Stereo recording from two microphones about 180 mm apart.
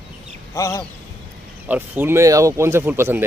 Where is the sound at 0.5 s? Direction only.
15° left (ahead or behind).